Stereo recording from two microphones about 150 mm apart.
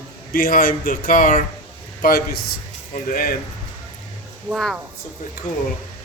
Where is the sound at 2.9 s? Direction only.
75° left (ahead or behind).